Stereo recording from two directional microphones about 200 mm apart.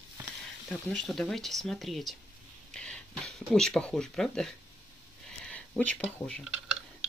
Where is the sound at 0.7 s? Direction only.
Centre (ahead or behind).